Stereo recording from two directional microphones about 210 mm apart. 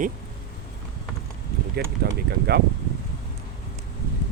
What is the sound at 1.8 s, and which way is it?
Speech, 50° right (ahead or behind).